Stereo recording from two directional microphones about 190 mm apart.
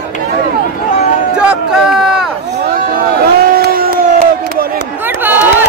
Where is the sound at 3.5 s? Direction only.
50° right (ahead or behind).